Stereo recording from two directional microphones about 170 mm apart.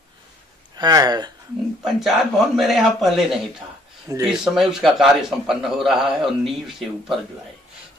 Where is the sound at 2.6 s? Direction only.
Centre (ahead or behind).